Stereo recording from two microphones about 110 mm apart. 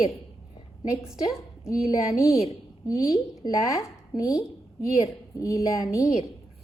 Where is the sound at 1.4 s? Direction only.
30° left (ahead or behind).